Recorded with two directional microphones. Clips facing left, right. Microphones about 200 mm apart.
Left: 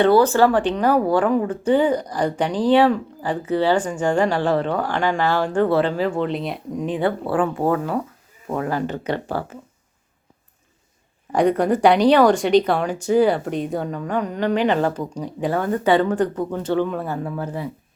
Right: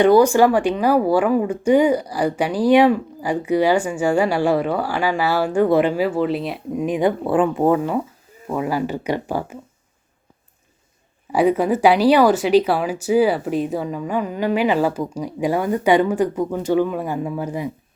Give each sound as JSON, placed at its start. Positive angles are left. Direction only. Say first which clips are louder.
{"t": 0.0, "sound": "speech", "louder": "right 2 dB", "side_deg": -15}
{"t": 6.8, "sound": "speech", "louder": "right 3 dB", "side_deg": -15}
{"t": 11.3, "sound": "speech", "louder": "right 1 dB", "side_deg": -5}